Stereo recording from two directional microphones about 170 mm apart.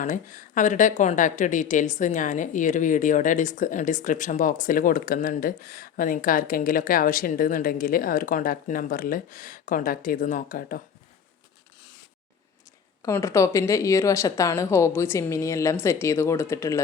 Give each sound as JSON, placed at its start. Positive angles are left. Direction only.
{"t": 0.0, "sound": "a woman's voice", "side_deg": 50}
{"t": 13.0, "sound": "speech", "side_deg": 15}